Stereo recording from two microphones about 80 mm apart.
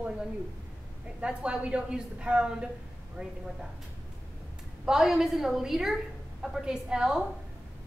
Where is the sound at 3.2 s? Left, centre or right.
Right.